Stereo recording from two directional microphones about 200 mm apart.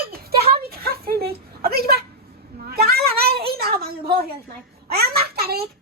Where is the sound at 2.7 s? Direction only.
50° right (ahead or behind).